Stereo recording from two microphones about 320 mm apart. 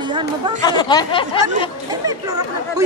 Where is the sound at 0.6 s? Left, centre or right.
Centre.